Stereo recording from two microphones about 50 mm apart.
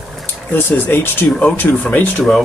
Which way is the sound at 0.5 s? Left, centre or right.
Left.